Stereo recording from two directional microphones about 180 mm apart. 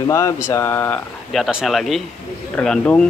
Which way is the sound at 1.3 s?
Centre (ahead or behind).